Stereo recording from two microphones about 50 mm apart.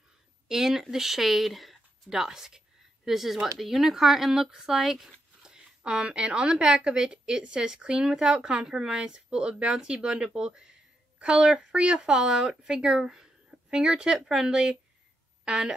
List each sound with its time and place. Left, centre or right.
0.5 s speech: centre
5.8 s speech: right